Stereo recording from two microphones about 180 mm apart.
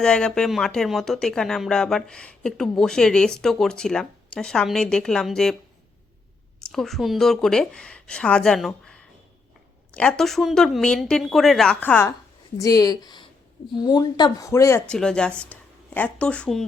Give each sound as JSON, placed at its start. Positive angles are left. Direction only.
{"t": 0.0, "sound": "speech", "side_deg": 5}
{"t": 6.7, "sound": "speech", "side_deg": 0}
{"t": 14.9, "sound": "speech", "side_deg": 5}
{"t": 15.5, "sound": "a sound", "side_deg": 5}
{"t": 16.0, "sound": "speech", "side_deg": 5}